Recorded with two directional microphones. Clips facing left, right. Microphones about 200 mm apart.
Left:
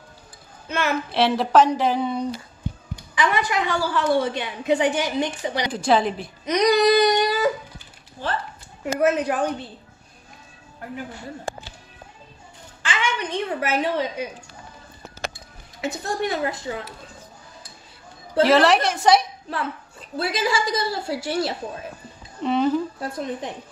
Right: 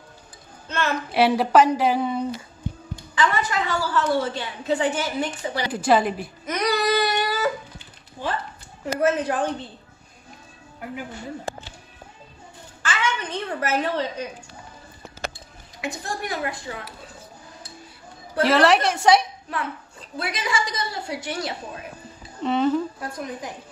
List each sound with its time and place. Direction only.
0.7 s a child's voice: 10° left (ahead or behind)
1.1 s speech: 10° right (ahead or behind)
3.2 s a woman's voice: 15° left (ahead or behind)
5.7 s a woman's voice: 5° right (ahead or behind)
6.4 s a sound: 20° left (ahead or behind)
9.0 s a woman's voice: 15° left (ahead or behind)
12.8 s a child's voice: 15° left (ahead or behind)
15.8 s a woman's voice: 25° left (ahead or behind)
18.4 s a woman's voice: 5° left (ahead or behind)
20.2 s a woman's voice: 30° left (ahead or behind)
22.4 s a woman's voice: 5° left (ahead or behind)
22.9 s a woman's voice: 25° left (ahead or behind)